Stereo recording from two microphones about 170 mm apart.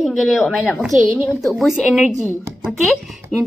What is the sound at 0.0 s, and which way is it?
Speech, centre (ahead or behind).